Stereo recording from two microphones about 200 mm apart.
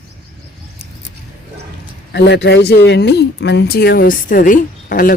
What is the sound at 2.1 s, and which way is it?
Speech, 60° left (ahead or behind).